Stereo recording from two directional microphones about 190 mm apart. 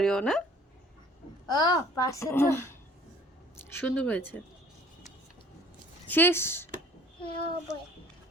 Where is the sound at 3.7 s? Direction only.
10° left (ahead or behind).